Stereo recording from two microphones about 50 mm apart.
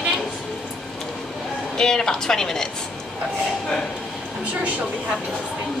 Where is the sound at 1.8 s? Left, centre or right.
Centre.